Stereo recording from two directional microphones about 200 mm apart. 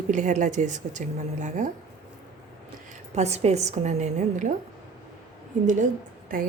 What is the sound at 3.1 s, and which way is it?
A woman's voice, 35° right (ahead or behind).